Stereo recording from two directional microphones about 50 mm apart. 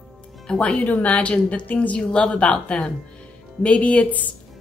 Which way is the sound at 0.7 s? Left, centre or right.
Left.